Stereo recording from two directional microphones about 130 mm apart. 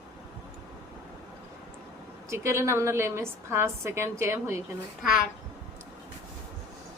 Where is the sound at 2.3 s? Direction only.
20° right (ahead or behind).